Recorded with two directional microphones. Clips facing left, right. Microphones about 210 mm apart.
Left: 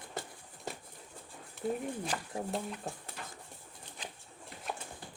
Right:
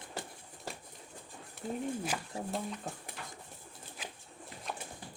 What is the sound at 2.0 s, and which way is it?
Speech, 5° right (ahead or behind).